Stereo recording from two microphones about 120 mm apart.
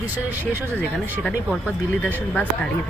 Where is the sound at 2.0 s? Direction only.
15° left (ahead or behind).